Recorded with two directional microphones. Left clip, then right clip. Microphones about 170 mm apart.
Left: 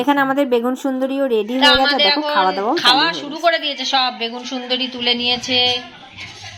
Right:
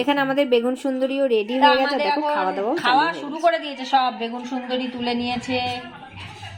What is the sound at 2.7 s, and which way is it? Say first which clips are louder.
A woman's voice: left 3 dB; 5° right (ahead or behind).